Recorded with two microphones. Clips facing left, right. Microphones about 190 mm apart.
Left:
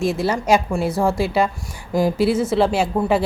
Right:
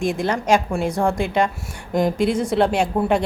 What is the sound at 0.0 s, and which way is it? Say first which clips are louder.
A woman's voice: left 1 dB; 5° left (ahead or behind).